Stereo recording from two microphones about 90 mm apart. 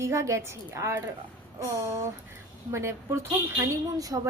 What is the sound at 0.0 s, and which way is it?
Speech, 35° right (ahead or behind).